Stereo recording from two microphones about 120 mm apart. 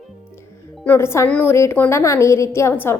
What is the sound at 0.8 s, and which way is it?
Speech, 20° left (ahead or behind).